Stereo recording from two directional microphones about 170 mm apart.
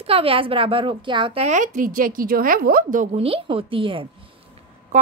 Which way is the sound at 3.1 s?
35° right (ahead or behind).